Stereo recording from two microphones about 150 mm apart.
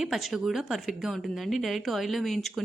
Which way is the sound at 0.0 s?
Centre (ahead or behind).